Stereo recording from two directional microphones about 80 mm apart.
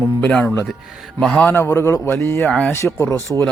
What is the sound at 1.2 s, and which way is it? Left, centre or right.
Speech, centre.